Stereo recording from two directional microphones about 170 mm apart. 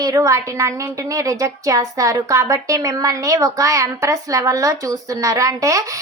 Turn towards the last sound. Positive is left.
turn(degrees=-20)  # may be behind; listen again after turning